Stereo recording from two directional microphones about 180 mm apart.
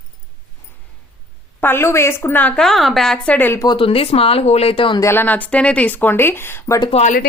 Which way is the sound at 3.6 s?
25° left (ahead or behind).